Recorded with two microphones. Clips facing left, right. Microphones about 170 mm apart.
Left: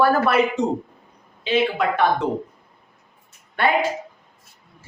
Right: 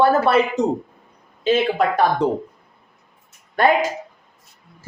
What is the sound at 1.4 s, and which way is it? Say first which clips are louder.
Speech: right 3 dB; 40° right (ahead or behind).